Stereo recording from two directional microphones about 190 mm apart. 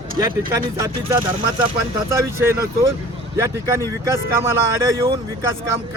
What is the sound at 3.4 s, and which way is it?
Speech, 15° right (ahead or behind).